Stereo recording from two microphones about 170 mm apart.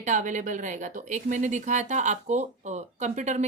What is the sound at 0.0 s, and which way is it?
Speech, 45° right (ahead or behind).